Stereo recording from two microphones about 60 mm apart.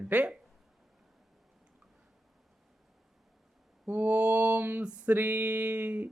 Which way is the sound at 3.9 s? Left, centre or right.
Right.